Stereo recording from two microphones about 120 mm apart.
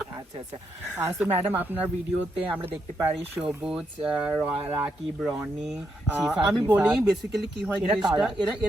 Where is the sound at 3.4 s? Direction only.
10° right (ahead or behind).